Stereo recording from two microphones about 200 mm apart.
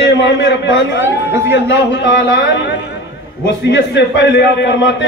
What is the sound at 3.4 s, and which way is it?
A man's voice, 60° left (ahead or behind).